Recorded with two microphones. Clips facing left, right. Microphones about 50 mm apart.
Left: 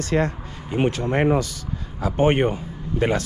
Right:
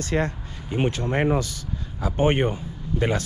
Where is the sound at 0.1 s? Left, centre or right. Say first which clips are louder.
Left 3 dB; left.